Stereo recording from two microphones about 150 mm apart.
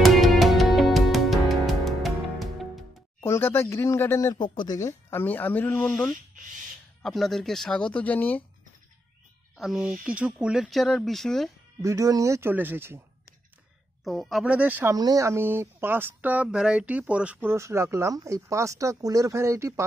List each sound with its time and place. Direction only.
0.0 s music: centre (ahead or behind)
3.2 s speech: 15° left (ahead or behind)
4.4 s speech: 30° left (ahead or behind)
4.7 s speech: 15° left (ahead or behind)
7.0 s speech: centre (ahead or behind)
9.6 s speech: 5° right (ahead or behind)
11.8 s speech: 20° right (ahead or behind)
14.0 s speech: centre (ahead or behind)
15.0 s speech: 25° right (ahead or behind)